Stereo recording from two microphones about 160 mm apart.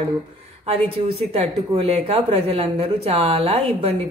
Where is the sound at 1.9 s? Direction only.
40° right (ahead or behind).